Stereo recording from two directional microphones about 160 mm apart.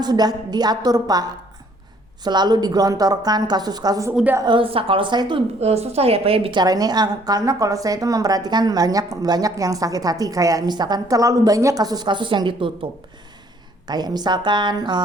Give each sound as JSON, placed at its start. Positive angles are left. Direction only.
{"t": 0.0, "sound": "a woman's voice", "side_deg": -25}
{"t": 4.1, "sound": "a woman's voice", "side_deg": -5}
{"t": 4.4, "sound": "a woman's voice", "side_deg": -30}
{"t": 5.5, "sound": "a woman's voice", "side_deg": -40}